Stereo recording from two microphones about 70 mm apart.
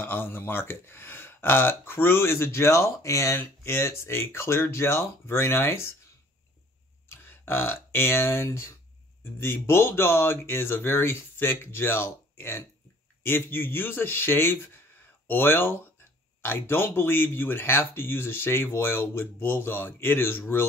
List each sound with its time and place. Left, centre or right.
0.0 s speech: left
3.3 s speech: left
7.1 s speech: left